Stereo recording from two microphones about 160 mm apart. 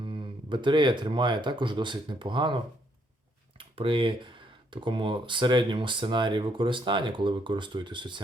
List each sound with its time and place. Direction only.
0.0 s speech: 30° right (ahead or behind)